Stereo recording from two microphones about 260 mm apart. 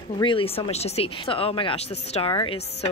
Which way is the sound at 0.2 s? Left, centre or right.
Centre.